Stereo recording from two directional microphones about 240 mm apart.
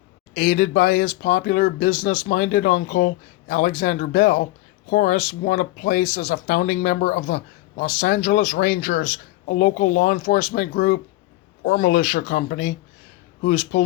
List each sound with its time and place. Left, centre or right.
0.3 s speech: left